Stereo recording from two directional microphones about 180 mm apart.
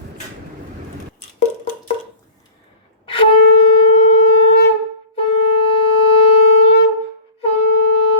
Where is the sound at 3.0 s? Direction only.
30° left (ahead or behind).